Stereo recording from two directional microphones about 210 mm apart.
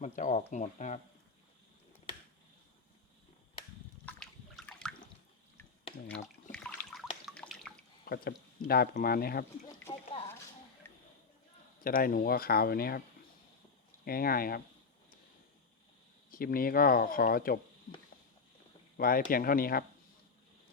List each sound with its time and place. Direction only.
0.0 s speech: 35° left (ahead or behind)
4.0 s water: 5° left (ahead or behind)
6.1 s water: 5° left (ahead or behind)
7.3 s drip: centre (ahead or behind)
8.0 s speech: 45° left (ahead or behind)
10.1 s a sound: 25° left (ahead or behind)
10.8 s a sound: 10° left (ahead or behind)
11.8 s speech: 45° left (ahead or behind)
14.0 s speech: 45° left (ahead or behind)
16.3 s speech: 45° left (ahead or behind)
18.9 s speech: 45° left (ahead or behind)